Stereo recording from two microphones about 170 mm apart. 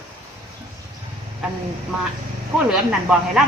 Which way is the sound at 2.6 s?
5° right (ahead or behind).